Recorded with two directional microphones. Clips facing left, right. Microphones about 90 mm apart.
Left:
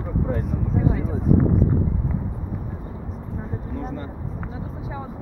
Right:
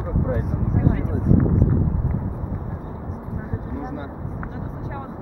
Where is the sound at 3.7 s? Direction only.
10° right (ahead or behind).